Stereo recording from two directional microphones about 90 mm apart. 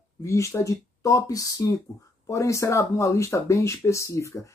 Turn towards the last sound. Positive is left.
turn(degrees=35)  # may be behind; listen again after turning